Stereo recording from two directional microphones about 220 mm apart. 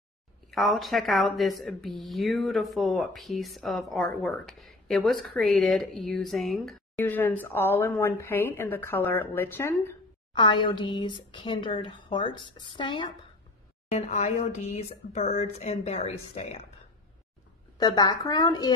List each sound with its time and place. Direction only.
0.5 s speech: centre (ahead or behind); by 16.6 s 30° left (ahead or behind)
17.7 s speech: 20° left (ahead or behind)